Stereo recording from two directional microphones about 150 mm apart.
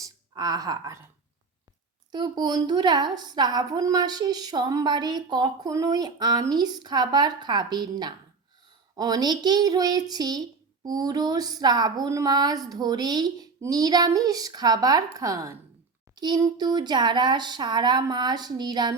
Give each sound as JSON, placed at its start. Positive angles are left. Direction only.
{"t": 0.0, "sound": "speech", "side_deg": -25}
{"t": 2.1, "sound": "a woman's voice", "side_deg": -25}